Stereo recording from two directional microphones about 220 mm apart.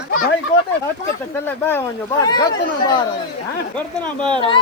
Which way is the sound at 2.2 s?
20° left (ahead or behind).